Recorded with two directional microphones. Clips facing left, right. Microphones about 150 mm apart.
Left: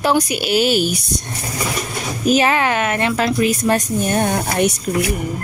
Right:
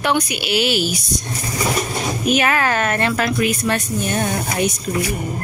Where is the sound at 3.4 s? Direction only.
40° left (ahead or behind).